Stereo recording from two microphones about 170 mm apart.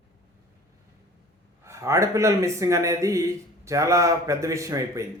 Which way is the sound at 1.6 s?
15° right (ahead or behind).